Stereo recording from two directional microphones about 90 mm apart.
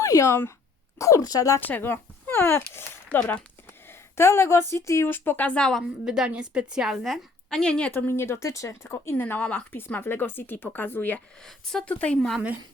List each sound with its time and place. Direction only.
0.0 s a sound: 35° left (ahead or behind)
0.9 s speech: 35° left (ahead or behind)
1.6 s speech: 20° left (ahead or behind)
6.1 s a woman's voice: 10° right (ahead or behind); by 7.9 s 10° left (ahead or behind)
7.9 s speech: 25° left (ahead or behind)
11.4 s a woman's voice: 5° left (ahead or behind)